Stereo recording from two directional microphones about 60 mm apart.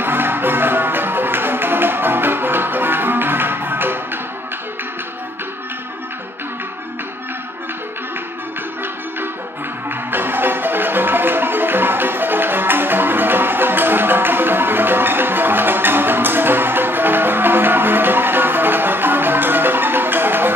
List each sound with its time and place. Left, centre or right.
0.0 s music: right
9.8 s marimba: right